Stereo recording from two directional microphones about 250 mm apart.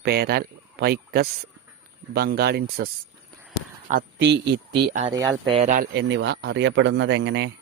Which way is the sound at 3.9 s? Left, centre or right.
Right.